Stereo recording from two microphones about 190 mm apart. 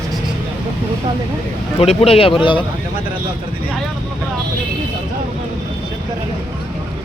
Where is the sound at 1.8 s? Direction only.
30° left (ahead or behind).